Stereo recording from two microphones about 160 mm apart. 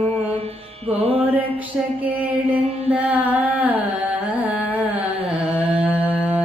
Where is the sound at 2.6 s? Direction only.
40° right (ahead or behind).